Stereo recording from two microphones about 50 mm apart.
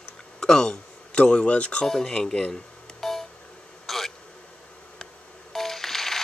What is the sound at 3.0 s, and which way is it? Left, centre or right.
Beep, centre.